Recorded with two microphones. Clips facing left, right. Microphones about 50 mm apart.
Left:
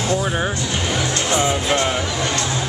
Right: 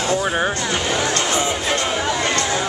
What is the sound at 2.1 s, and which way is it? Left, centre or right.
Speech, right.